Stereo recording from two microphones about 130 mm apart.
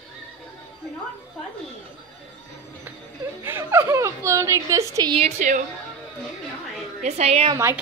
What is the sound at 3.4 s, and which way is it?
Laughter, 20° right (ahead or behind).